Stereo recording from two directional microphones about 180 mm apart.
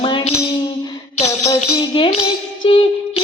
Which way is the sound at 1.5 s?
25° left (ahead or behind).